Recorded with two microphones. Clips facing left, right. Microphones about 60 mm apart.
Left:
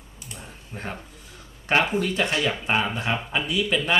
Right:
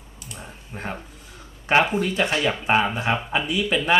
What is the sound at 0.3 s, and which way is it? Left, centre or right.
Typing, centre.